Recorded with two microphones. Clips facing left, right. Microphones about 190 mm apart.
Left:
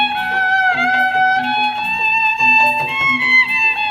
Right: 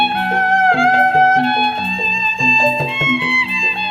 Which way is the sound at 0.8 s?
50° right (ahead or behind).